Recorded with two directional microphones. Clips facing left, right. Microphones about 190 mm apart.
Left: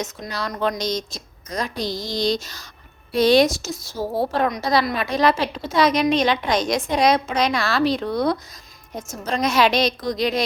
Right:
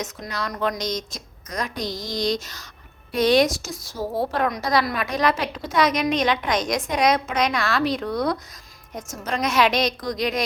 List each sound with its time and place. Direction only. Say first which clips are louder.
0.0 s a woman's voice: left 2 dB; 30° left (ahead or behind)